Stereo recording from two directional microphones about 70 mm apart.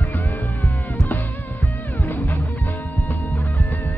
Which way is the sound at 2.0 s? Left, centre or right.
Left.